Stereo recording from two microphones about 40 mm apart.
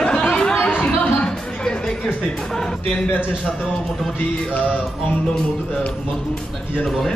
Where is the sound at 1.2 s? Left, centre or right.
Centre.